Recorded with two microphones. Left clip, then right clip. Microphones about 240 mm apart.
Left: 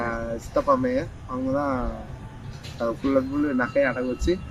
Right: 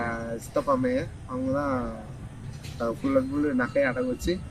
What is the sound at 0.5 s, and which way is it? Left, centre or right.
A man's voice, right.